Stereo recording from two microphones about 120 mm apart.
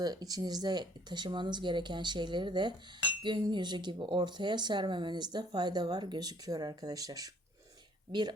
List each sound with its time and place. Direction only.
0.0 s speech: 35° right (ahead or behind)